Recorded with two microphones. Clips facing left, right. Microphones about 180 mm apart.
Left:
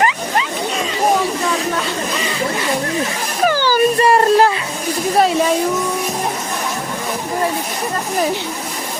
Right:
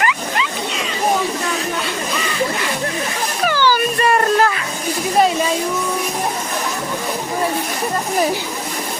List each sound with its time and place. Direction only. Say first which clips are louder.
0.0 s vehicle: left 3 dB; 30° left (ahead or behind)
3.4 s music: left 1 dB; 40° left (ahead or behind)
3.9 s a sound: left 4 dB; 30° left (ahead or behind)